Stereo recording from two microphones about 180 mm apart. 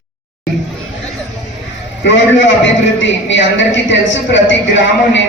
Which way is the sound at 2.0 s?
90° left.